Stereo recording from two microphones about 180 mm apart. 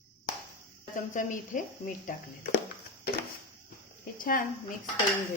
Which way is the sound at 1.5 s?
45° left (ahead or behind).